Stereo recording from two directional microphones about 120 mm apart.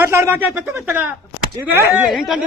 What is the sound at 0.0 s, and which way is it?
A man's voice, 20° right (ahead or behind).